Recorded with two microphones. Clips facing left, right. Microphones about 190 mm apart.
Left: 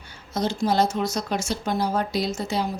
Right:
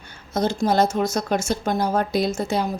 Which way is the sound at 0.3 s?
50° right (ahead or behind).